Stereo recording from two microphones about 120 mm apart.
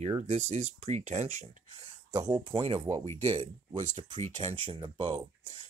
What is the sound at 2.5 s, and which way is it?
Speech, 50° right (ahead or behind).